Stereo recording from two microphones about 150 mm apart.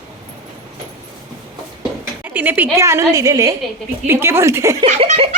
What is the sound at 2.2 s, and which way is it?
A woman's voice, 10° right (ahead or behind).